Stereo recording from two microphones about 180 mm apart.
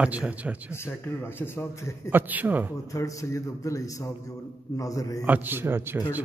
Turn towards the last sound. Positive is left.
turn(degrees=-15)  # may be behind; listen again after turning